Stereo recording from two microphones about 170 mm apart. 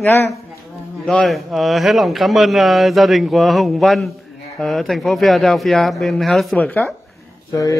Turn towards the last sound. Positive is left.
turn(degrees=20)  # may be behind; listen again after turning